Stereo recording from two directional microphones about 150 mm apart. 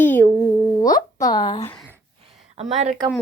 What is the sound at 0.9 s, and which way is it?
Speech, 25° left (ahead or behind).